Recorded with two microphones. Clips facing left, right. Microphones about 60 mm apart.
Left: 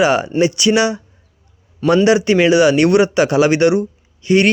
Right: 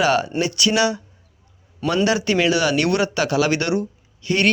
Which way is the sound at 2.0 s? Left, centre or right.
Centre.